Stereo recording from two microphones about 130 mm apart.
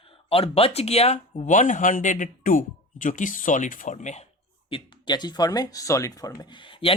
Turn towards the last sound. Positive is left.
turn(degrees=45)  # may be behind; listen again after turning